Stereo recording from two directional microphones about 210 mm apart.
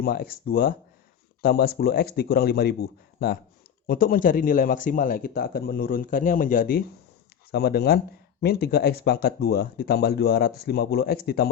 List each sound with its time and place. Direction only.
0.0 s speech: 45° left (ahead or behind)